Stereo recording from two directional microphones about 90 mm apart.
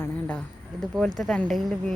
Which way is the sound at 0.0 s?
20° left (ahead or behind).